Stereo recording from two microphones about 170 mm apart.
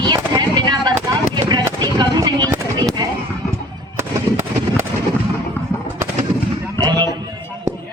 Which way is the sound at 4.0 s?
15° right (ahead or behind).